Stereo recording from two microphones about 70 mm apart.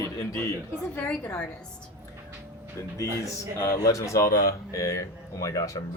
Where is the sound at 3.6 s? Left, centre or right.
Left.